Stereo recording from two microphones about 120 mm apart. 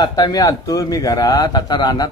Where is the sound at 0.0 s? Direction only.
35° left (ahead or behind).